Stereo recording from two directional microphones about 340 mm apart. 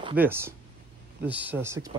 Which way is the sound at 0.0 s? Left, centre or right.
Centre.